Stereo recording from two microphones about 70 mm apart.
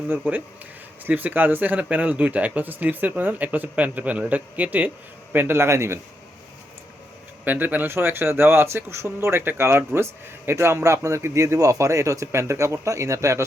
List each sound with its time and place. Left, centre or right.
0.1 s speech: right
5.3 s speech: right
7.4 s speech: right